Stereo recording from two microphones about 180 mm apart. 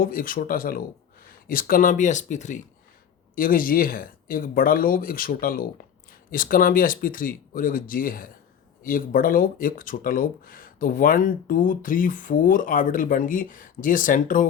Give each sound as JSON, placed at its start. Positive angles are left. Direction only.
{"t": 0.0, "sound": "speech", "side_deg": 50}